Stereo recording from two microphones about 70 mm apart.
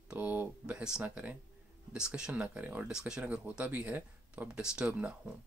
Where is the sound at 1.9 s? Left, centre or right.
Centre.